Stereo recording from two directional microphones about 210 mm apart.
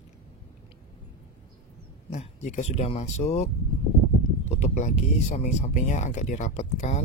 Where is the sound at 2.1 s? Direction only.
35° left (ahead or behind).